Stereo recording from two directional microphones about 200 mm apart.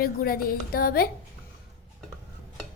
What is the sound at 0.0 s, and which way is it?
A woman's voice, 50° left (ahead or behind).